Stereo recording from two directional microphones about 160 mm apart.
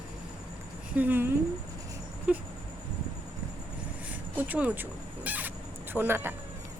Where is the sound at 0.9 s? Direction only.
10° right (ahead or behind).